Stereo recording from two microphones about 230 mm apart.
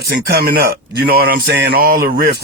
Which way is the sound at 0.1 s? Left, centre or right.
Right.